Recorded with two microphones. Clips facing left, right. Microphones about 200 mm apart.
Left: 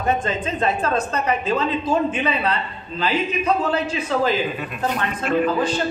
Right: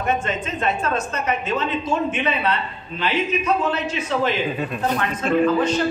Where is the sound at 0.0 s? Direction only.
30° left (ahead or behind).